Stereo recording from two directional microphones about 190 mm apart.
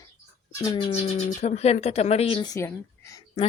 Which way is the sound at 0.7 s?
15° left (ahead or behind).